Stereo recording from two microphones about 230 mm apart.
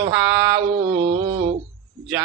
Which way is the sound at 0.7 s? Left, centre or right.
Right.